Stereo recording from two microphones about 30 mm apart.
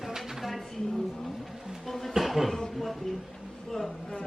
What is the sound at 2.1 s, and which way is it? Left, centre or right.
Speech, centre.